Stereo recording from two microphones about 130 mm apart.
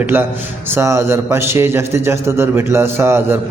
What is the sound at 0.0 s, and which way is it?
A man's voice, 15° right (ahead or behind).